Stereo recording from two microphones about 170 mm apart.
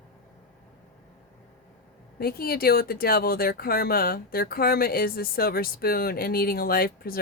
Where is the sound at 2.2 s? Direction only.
65° left (ahead or behind).